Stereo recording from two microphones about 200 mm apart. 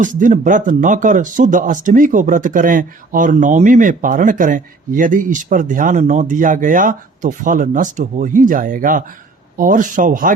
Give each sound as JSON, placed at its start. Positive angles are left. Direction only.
{"t": 0.0, "sound": "speech", "side_deg": -40}